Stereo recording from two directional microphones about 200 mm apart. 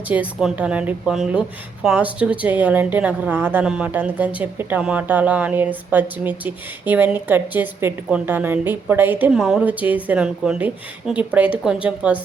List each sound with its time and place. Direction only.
0.1 s a woman's voice: 5° right (ahead or behind)